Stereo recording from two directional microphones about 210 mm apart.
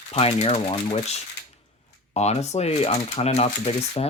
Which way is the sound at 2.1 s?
30° left (ahead or behind).